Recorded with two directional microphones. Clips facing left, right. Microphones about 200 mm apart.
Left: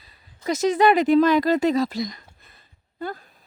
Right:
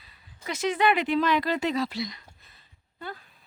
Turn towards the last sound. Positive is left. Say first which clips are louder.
# left 8 dB
turn(degrees=45)  # may be behind; listen again after turning